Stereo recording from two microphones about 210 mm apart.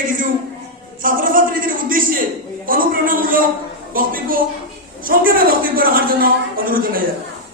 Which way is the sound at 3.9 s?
40° right (ahead or behind).